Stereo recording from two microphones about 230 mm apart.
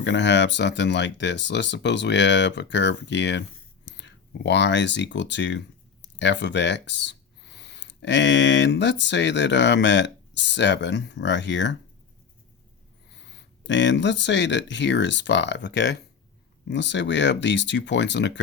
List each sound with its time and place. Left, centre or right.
0.0 s speech: left
13.3 s speech: left